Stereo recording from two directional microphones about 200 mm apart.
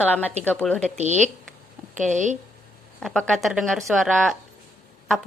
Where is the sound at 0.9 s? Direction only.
35° right (ahead or behind).